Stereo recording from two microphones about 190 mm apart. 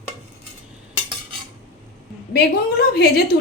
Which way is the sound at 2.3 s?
60° left (ahead or behind).